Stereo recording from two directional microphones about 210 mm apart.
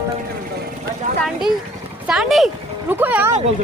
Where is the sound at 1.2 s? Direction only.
Centre (ahead or behind).